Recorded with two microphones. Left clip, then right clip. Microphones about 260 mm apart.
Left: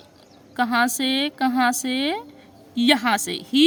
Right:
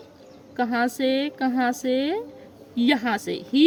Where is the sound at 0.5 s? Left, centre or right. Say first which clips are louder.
Left 3 dB; left.